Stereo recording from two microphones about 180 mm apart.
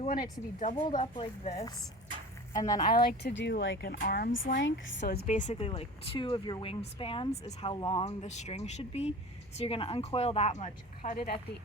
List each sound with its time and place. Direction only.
0.1 s speech: 45° left (ahead or behind)
1.1 s speech: 35° left (ahead or behind)
2.5 s speech: 20° left (ahead or behind)
2.8 s speech: 60° left (ahead or behind); by 3.9 s 80° left
4.0 s speech: 55° left (ahead or behind); by 4.4 s 75° left (ahead or behind)
4.5 s a woman's voice: 90° left; by 5.2 s 70° left (ahead or behind)
5.2 s speech: 45° left (ahead or behind)